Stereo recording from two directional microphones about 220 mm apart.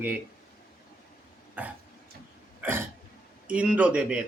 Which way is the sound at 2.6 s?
10° right (ahead or behind).